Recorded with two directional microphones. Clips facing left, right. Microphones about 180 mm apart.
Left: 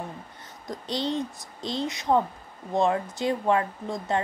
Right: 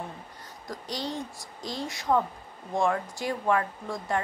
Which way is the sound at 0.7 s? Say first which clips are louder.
Left 5 dB; 25° left (ahead or behind).